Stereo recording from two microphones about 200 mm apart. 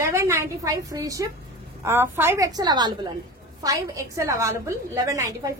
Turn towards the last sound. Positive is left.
turn(degrees=-15)  # may be behind; listen again after turning